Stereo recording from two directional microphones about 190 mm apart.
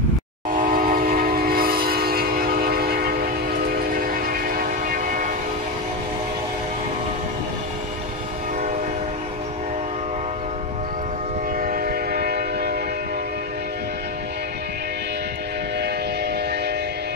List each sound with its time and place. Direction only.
0.6 s train: 45° right (ahead or behind)
11.6 s train: 50° right (ahead or behind)